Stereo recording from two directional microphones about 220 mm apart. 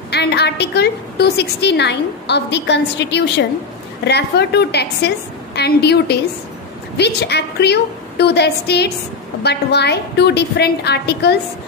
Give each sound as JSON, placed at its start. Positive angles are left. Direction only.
{"t": 0.1, "sound": "a woman's voice", "side_deg": 50}